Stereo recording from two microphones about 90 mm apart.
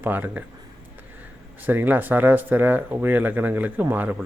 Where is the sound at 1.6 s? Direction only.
20° right (ahead or behind).